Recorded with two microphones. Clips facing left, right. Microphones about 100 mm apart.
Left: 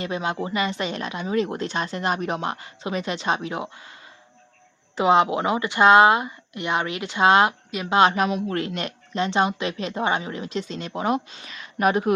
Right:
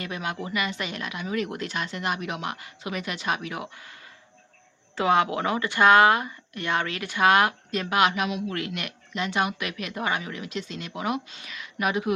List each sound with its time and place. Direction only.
0.0 s speech: 25° left (ahead or behind)
4.9 s speech: 20° left (ahead or behind); by 12.1 s 45° left (ahead or behind)